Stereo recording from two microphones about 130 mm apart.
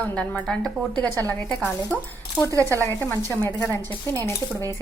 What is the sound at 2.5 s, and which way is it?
Speech, 25° right (ahead or behind).